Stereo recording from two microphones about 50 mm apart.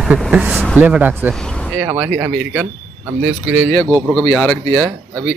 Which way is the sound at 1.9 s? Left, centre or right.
Right.